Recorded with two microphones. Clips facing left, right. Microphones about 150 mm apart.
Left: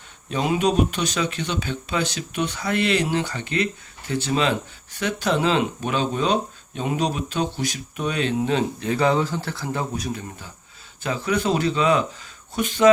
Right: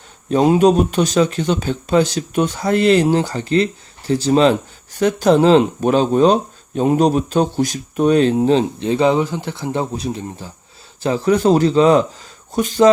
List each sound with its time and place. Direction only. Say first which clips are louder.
0.3 s speech: right 9 dB; 40° right (ahead or behind)